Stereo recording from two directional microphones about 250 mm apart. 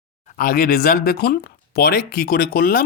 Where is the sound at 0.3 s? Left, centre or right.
Left.